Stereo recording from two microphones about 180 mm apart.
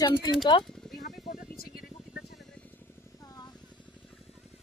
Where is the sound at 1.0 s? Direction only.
55° left (ahead or behind).